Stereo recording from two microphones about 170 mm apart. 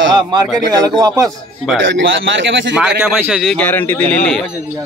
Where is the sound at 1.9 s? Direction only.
90° right.